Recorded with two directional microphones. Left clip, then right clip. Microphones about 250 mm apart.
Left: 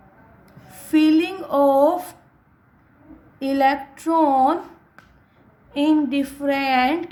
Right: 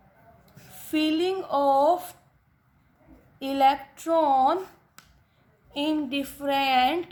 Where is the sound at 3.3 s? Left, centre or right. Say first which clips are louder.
Left 3 dB; centre.